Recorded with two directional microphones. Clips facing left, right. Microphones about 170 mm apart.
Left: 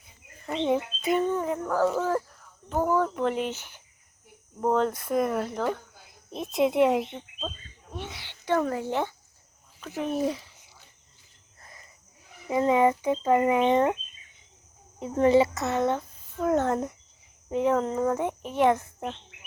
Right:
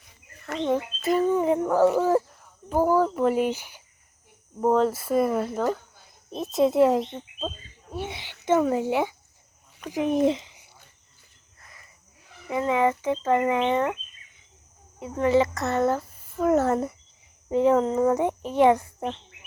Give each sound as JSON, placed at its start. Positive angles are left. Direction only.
{"t": 0.4, "sound": "speech", "side_deg": 5}
{"t": 1.5, "sound": "speech", "side_deg": -20}
{"t": 7.3, "sound": "a sound", "side_deg": -10}
{"t": 8.0, "sound": "speech", "side_deg": -20}
{"t": 10.2, "sound": "a sound", "side_deg": -20}
{"t": 11.6, "sound": "cricket", "side_deg": 25}
{"t": 12.3, "sound": "speech", "side_deg": 25}
{"t": 14.9, "sound": "speech", "side_deg": 25}
{"t": 15.5, "sound": "a child's voice", "side_deg": 0}